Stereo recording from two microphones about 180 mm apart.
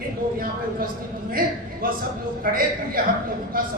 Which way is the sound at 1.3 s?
55° right (ahead or behind).